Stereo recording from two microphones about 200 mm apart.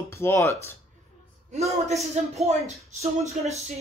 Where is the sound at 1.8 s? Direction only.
35° right (ahead or behind).